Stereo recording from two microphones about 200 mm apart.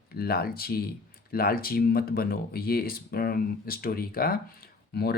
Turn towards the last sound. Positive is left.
turn(degrees=55)  # may be behind; listen again after turning